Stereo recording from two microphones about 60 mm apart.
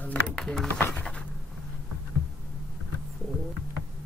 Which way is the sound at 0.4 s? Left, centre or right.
Centre.